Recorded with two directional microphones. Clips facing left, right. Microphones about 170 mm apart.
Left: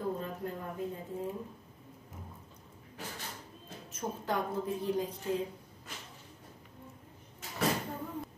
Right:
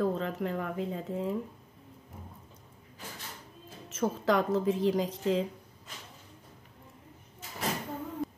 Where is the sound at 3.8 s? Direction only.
90° right.